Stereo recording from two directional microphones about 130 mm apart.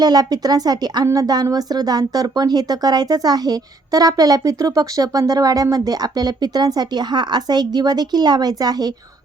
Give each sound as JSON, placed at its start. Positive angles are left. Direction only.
{"t": 0.0, "sound": "a woman's voice", "side_deg": -30}